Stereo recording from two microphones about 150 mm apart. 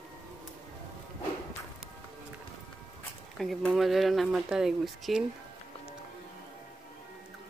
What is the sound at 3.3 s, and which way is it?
Speech, centre (ahead or behind).